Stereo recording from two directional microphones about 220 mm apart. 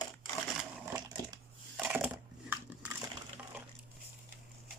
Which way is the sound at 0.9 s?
15° right (ahead or behind).